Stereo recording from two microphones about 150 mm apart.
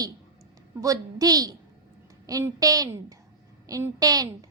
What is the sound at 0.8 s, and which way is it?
A woman's voice, 25° right (ahead or behind).